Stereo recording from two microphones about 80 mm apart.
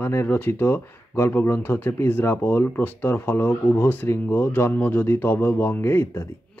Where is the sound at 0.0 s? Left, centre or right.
Left.